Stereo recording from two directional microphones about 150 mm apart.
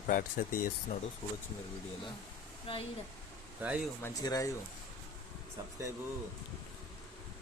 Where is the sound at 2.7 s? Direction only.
35° left (ahead or behind).